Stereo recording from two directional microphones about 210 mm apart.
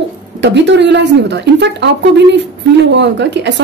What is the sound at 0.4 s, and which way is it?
Speech, 55° right (ahead or behind).